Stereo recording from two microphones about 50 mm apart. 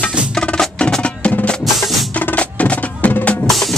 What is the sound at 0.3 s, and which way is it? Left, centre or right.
Music, centre.